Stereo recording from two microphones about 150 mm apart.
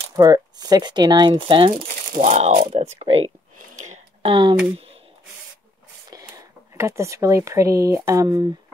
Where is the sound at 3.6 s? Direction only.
55° right (ahead or behind).